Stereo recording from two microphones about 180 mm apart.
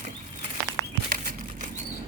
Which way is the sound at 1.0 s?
50° right (ahead or behind).